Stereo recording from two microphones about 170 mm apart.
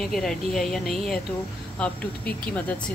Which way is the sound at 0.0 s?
5° left (ahead or behind).